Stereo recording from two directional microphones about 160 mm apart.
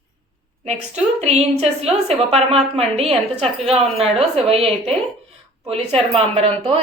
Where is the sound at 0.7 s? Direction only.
45° right (ahead or behind).